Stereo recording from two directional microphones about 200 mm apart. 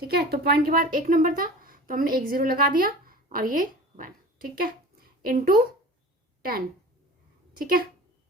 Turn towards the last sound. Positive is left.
turn(degrees=-45)  # may be behind; listen again after turning